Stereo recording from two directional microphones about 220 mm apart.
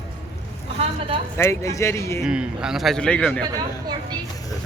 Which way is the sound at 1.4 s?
15° left (ahead or behind).